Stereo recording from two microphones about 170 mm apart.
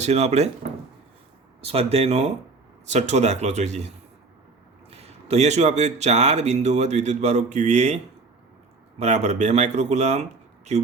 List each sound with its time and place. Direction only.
0.0 s speech: 40° right (ahead or behind)
1.6 s speech: 35° right (ahead or behind)
9.0 s speech: 40° right (ahead or behind)